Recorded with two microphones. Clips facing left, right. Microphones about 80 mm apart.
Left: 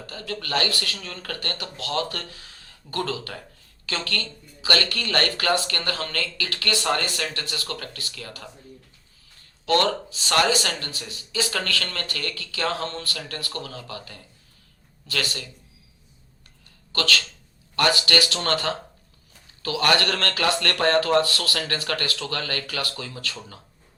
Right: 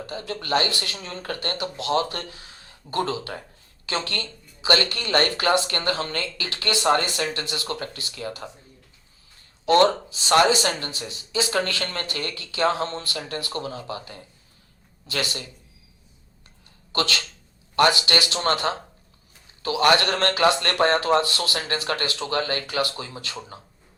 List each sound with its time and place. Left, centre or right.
0.0 s speech: right
9.6 s speech: right
16.9 s speech: right